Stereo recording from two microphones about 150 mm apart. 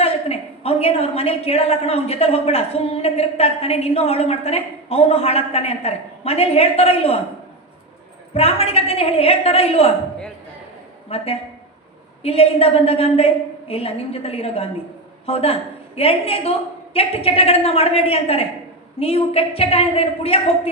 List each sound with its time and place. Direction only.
0.0 s a woman's voice: 40° left (ahead or behind)
8.3 s a woman's voice: 40° left (ahead or behind)
11.1 s a woman's voice: 40° left (ahead or behind)